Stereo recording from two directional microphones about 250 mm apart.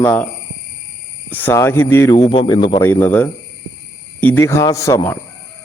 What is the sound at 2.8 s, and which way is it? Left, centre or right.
Speech, centre.